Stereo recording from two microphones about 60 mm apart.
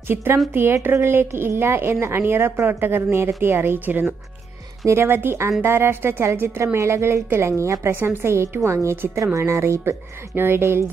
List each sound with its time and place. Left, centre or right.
0.1 s a woman's voice: right
4.8 s a woman's voice: right
9.4 s speech: right